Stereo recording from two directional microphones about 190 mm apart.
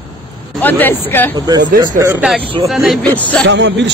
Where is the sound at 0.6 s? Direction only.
10° left (ahead or behind).